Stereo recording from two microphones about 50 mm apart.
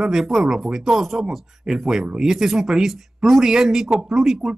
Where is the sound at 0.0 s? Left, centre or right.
Centre.